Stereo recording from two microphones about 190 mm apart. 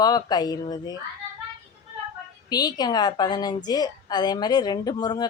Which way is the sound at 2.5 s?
20° left (ahead or behind).